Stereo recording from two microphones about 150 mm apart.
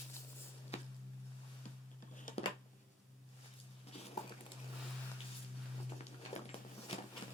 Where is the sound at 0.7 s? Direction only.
45° left (ahead or behind).